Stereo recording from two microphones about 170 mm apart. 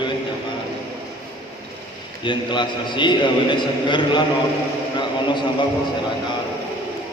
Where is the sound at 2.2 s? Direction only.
30° left (ahead or behind).